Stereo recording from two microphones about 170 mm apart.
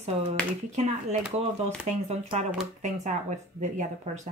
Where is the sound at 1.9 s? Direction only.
40° right (ahead or behind).